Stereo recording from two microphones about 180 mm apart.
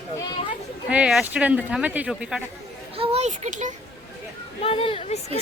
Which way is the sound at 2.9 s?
35° right (ahead or behind).